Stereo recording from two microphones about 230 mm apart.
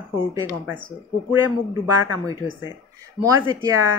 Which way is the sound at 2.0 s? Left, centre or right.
Centre.